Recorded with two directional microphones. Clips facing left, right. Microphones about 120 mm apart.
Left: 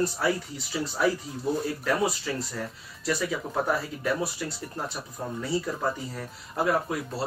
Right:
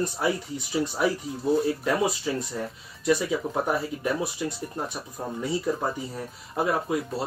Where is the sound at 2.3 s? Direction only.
20° right (ahead or behind).